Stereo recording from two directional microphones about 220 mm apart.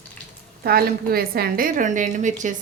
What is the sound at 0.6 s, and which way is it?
A woman's voice, 45° right (ahead or behind).